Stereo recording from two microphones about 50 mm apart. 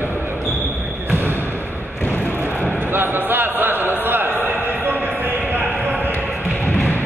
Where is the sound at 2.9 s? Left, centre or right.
Right.